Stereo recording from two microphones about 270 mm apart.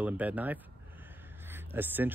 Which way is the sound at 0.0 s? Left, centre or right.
Centre.